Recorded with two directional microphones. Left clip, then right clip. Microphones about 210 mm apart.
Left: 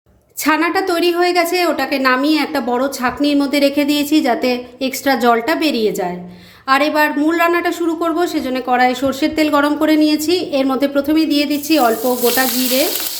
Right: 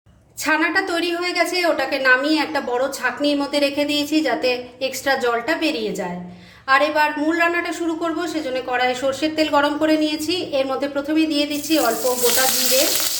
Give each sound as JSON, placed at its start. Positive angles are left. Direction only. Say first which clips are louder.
{"t": 0.4, "sound": "a woman's voice", "louder": "left 4 dB", "side_deg": 35}